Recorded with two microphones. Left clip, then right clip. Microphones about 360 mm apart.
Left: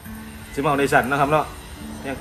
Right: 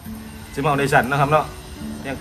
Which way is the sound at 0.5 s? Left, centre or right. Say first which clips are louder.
Right 1 dB; right.